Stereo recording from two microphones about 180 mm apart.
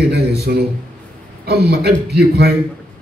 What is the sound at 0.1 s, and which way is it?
A man's voice, 60° right (ahead or behind).